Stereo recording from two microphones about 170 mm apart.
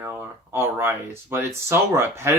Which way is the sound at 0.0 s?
15° right (ahead or behind).